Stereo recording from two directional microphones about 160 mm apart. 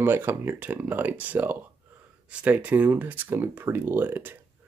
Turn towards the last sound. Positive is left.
turn(degrees=-10)  # may be behind; listen again after turning